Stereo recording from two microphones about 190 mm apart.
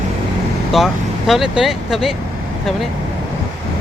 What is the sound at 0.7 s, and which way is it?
Speech, centre (ahead or behind).